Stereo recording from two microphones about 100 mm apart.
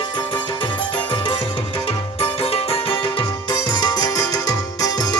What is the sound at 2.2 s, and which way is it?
Music, 75° left (ahead or behind).